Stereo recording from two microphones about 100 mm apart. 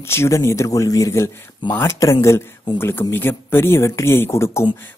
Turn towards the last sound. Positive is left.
turn(degrees=25)  # may be behind; listen again after turning